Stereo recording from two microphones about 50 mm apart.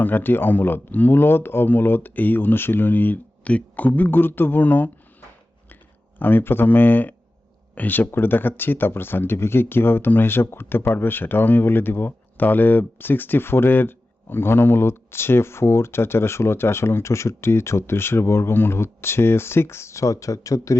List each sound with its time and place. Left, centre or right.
0.0 s speech: left
6.1 s speech: left